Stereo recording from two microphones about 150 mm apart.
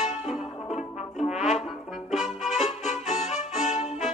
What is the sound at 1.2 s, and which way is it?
Brass instrument, 50° left (ahead or behind).